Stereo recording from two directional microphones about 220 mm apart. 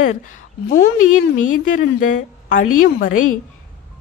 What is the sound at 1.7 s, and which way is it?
A woman's voice, 35° left (ahead or behind).